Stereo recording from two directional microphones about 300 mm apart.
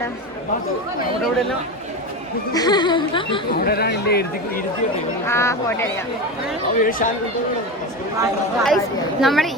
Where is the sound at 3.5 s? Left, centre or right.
Left.